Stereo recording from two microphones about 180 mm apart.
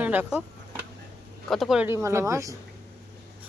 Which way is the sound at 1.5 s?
Centre (ahead or behind).